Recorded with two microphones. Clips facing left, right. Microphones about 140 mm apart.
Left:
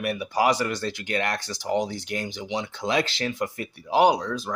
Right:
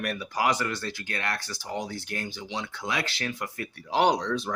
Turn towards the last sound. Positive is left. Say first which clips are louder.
# left 3 dB
turn(degrees=5)  # may be behind; listen again after turning